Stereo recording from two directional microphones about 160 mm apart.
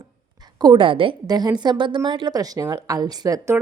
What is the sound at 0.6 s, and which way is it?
A woman's voice, 30° right (ahead or behind).